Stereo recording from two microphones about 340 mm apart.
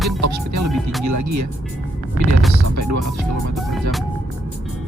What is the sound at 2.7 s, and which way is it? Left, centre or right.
Speech, right.